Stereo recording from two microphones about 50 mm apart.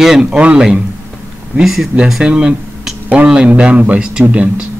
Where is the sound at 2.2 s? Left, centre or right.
Centre.